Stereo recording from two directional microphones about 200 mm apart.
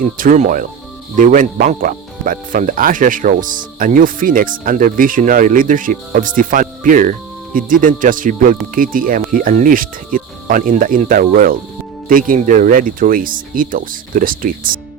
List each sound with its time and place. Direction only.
0.0 s speech: 40° right (ahead or behind)